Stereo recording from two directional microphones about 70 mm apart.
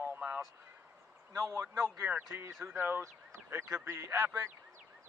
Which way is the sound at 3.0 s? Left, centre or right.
Right.